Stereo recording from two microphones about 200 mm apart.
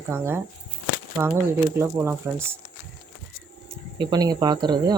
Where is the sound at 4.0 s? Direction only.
20° right (ahead or behind).